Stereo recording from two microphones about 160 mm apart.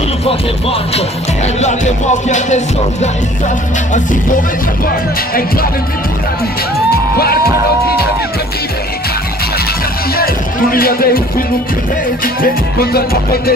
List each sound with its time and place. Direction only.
0.2 s music: 35° left (ahead or behind); by 4.4 s 55° left (ahead or behind)
10.1 s music: 70° left (ahead or behind)
12.9 s music: 70° left (ahead or behind)